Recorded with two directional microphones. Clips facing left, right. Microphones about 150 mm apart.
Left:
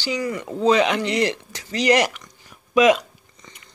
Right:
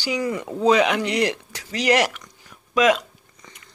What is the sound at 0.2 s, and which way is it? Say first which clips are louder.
Speech: right 1 dB; 25° right (ahead or behind).